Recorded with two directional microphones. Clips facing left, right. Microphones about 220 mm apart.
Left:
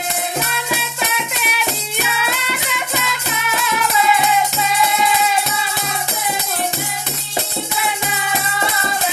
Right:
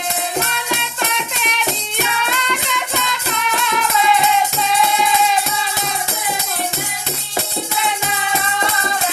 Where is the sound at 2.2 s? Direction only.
5° left (ahead or behind).